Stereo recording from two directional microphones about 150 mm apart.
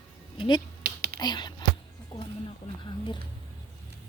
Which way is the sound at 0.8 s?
90° right.